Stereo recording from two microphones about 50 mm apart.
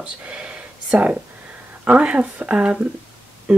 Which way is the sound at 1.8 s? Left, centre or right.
Right.